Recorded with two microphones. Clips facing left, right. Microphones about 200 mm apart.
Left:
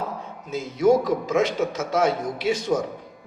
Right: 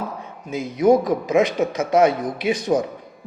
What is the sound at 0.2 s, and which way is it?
A man's voice, 15° right (ahead or behind).